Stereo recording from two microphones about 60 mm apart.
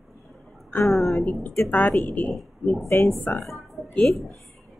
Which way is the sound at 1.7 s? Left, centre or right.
Left.